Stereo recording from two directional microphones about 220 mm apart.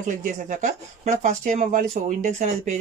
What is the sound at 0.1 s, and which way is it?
Speech, 35° right (ahead or behind).